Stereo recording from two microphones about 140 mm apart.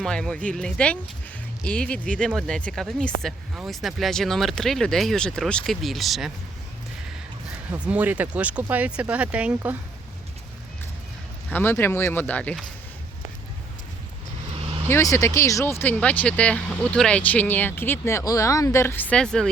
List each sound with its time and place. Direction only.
0.0 s speech: 5° left (ahead or behind)
7.7 s speech: 10° right (ahead or behind)
11.5 s speech: 15° left (ahead or behind)
14.8 s speech: 20° left (ahead or behind); by 19.5 s 5° left (ahead or behind)